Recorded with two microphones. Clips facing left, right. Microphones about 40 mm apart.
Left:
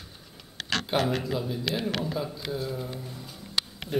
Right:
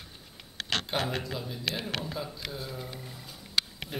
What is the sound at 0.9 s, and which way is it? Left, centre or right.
Speech, centre.